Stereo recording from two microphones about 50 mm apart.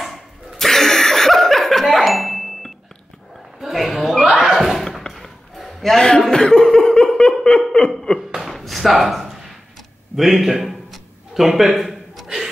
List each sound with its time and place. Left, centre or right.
0.0 s chuckle: centre
3.6 s dog: centre
4.4 s neigh: centre
4.8 s a sound: centre
5.9 s speech: centre
6.3 s laughter: centre
8.4 s a sound: centre